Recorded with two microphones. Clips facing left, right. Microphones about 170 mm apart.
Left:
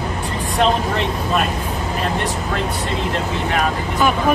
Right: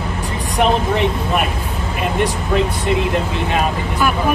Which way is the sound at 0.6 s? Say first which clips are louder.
Right 2 dB; 15° right (ahead or behind).